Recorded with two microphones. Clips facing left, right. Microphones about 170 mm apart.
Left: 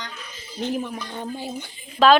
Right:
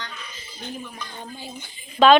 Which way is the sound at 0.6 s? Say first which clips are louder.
Left 9 dB; 80° left.